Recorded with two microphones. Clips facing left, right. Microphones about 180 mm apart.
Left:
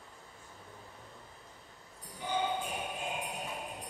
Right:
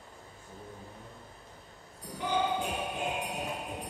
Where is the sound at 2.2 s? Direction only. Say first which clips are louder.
Right 4 dB; 75° right (ahead or behind).